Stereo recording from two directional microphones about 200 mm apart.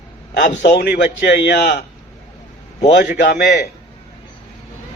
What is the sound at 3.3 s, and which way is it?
Speech, 55° left (ahead or behind).